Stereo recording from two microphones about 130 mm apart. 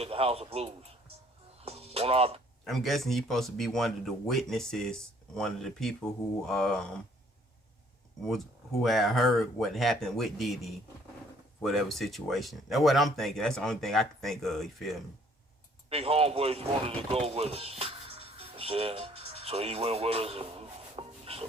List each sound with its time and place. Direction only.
0.0 s speech: 50° right (ahead or behind)
1.6 s music: 50° right (ahead or behind)
2.6 s speech: centre (ahead or behind)
8.8 s speech: centre (ahead or behind)
15.9 s speech: 50° right (ahead or behind)